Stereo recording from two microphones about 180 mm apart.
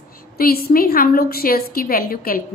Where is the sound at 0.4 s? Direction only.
55° left (ahead or behind).